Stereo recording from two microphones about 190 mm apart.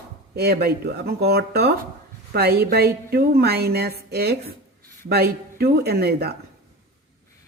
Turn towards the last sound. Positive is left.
turn(degrees=-55)  # may be behind; listen again after turning